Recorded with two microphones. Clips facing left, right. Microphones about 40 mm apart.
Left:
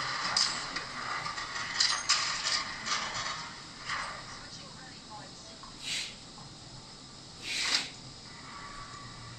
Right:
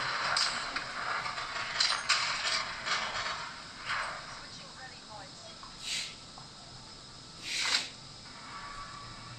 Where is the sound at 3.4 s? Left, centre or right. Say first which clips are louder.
Right 1 dB; centre.